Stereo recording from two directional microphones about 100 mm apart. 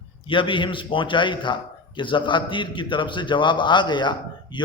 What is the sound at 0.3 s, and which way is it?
A man's voice, 55° left (ahead or behind).